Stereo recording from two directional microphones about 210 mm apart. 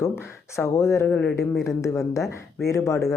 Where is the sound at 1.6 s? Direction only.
15° left (ahead or behind).